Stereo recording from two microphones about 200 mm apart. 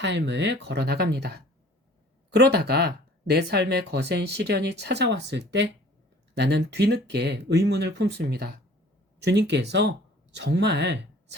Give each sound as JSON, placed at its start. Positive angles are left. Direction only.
{"t": 0.0, "sound": "speech", "side_deg": -60}